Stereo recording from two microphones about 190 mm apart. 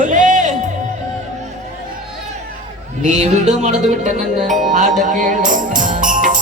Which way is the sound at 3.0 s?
40° right (ahead or behind).